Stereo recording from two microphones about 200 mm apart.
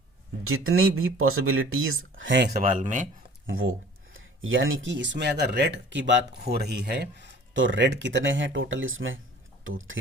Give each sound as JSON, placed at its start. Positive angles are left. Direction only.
{"t": 0.4, "sound": "speech", "side_deg": -90}
{"t": 2.6, "sound": "speech", "side_deg": -40}
{"t": 3.4, "sound": "speech", "side_deg": -85}